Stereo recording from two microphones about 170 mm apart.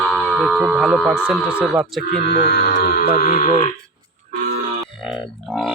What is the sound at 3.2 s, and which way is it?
Speech, 55° left (ahead or behind).